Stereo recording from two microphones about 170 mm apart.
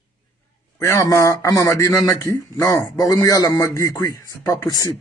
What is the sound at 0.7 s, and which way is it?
A man's voice, 15° left (ahead or behind).